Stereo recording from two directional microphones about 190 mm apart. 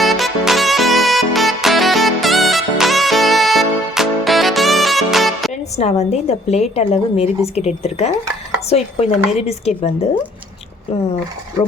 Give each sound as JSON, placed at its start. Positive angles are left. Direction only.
{"t": 0.0, "sound": "music", "side_deg": 0}
{"t": 5.7, "sound": "a woman's voice", "side_deg": 35}